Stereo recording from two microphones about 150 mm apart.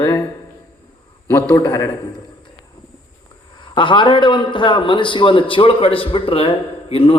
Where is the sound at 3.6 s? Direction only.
30° left (ahead or behind).